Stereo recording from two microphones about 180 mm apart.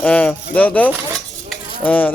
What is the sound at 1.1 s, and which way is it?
Cutlery, 5° left (ahead or behind).